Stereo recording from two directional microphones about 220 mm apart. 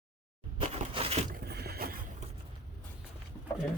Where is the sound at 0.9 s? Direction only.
25° right (ahead or behind).